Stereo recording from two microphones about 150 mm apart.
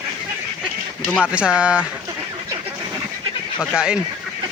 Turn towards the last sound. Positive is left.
turn(degrees=-5)  # may be behind; listen again after turning